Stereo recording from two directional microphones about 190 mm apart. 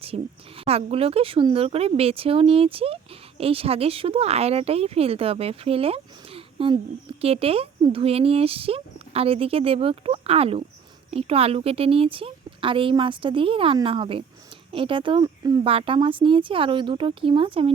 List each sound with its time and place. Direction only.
0.1 s a woman's voice: 40° right (ahead or behind)